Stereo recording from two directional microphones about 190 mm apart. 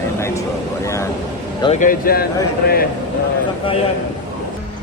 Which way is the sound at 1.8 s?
45° left (ahead or behind).